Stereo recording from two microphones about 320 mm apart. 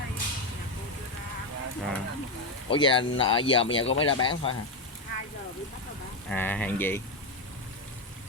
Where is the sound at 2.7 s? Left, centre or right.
Centre.